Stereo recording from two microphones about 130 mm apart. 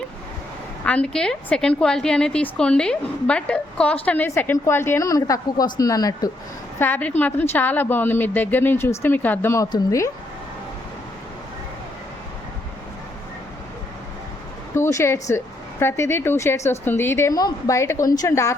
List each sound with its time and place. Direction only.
0.9 s a woman's voice: 10° left (ahead or behind); by 6.3 s 30° left (ahead or behind)
6.7 s a woman's voice: 15° left (ahead or behind)
14.8 s a woman's voice: 20° left (ahead or behind)